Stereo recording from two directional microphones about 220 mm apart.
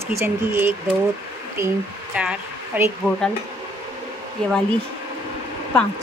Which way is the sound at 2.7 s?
10° right (ahead or behind).